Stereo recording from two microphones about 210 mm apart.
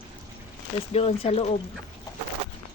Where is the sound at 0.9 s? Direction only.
30° left (ahead or behind).